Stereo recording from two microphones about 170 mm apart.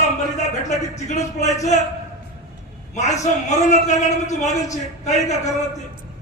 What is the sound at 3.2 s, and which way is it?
Speech, 45° left (ahead or behind).